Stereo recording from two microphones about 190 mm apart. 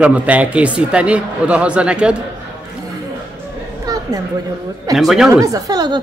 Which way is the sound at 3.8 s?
20° right (ahead or behind).